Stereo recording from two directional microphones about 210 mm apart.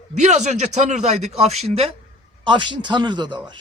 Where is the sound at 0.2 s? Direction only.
35° right (ahead or behind).